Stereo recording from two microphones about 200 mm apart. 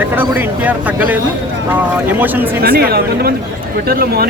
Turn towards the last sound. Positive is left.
turn(degrees=-50)  # may be behind; listen again after turning